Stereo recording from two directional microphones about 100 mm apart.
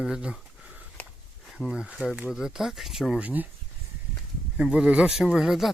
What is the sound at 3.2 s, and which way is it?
Speech, 15° right (ahead or behind).